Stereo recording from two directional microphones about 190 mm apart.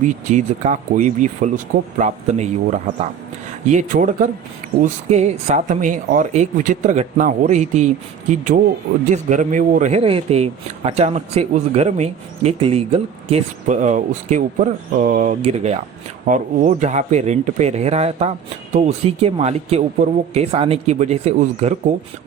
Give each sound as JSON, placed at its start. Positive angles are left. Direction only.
{"t": 0.0, "sound": "speech", "side_deg": -40}
{"t": 9.1, "sound": "speech", "side_deg": -40}